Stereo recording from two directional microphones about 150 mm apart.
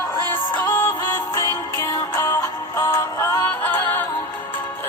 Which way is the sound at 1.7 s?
25° left (ahead or behind).